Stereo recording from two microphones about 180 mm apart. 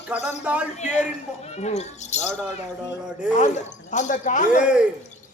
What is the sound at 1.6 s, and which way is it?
Speech, 40° left (ahead or behind).